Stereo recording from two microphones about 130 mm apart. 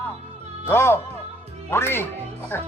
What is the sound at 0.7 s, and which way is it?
A man's voice, 20° left (ahead or behind).